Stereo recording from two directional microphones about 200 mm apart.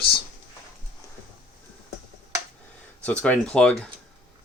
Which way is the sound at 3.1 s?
5° left (ahead or behind).